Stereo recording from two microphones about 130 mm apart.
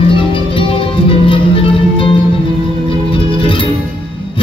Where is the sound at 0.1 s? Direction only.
45° left (ahead or behind).